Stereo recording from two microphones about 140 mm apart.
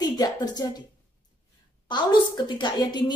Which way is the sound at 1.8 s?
35° left (ahead or behind).